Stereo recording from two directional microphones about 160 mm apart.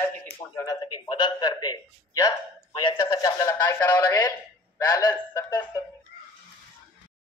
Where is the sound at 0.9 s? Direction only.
30° left (ahead or behind).